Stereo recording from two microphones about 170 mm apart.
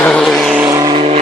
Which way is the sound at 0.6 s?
20° right (ahead or behind).